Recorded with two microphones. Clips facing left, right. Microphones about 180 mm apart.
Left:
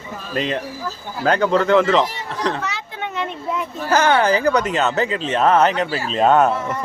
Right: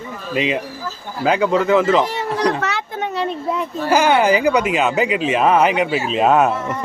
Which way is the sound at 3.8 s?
10° right (ahead or behind).